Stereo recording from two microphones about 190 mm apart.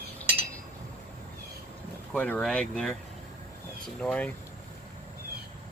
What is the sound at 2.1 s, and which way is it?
Speech, 5° left (ahead or behind).